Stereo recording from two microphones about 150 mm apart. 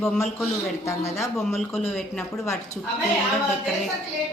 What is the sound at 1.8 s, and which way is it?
Speech, 15° left (ahead or behind).